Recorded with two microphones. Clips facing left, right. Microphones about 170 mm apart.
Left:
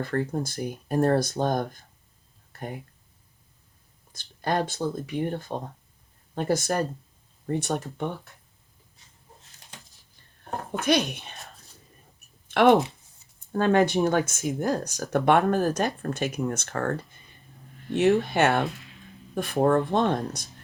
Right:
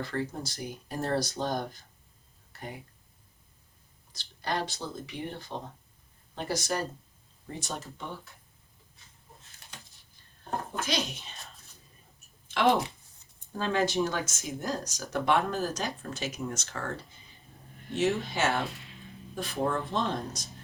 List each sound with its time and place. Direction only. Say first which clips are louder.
0.0 s speech: left 6 dB; 55° left (ahead or behind)
2.5 s a sound: left 6 dB; 50° left (ahead or behind)
4.1 s speech: left 6 dB; 50° left (ahead or behind)
10.7 s speech: left 11 dB; 60° left (ahead or behind)
12.5 s a sound: left 6 dB; 60° left (ahead or behind)
13.5 s speech: left 7 dB; 55° left (ahead or behind)